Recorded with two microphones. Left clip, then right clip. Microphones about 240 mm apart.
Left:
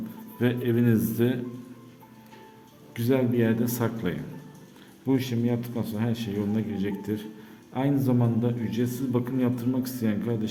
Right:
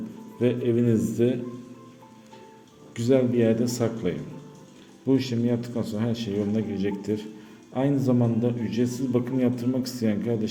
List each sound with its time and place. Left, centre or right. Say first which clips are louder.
0.3 s a man's voice: right 2 dB; centre
2.9 s a man's voice: right 3 dB; centre